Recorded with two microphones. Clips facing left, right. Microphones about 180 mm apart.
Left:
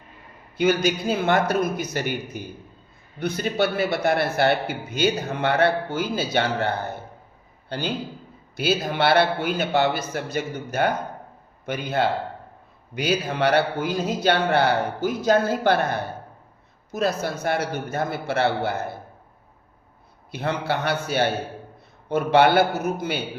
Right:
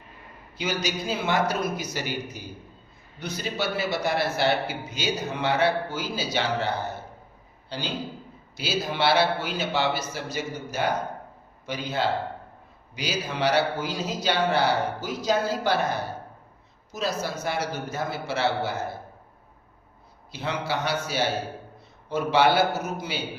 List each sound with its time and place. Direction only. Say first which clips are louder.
0.5 s a man's voice: left 8 dB; 55° left (ahead or behind)
20.3 s a man's voice: left 4 dB; 55° left (ahead or behind)